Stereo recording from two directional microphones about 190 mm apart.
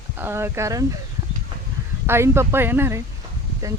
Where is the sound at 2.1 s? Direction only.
15° right (ahead or behind).